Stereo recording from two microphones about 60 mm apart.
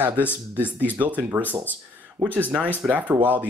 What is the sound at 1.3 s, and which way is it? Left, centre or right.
Speech, right.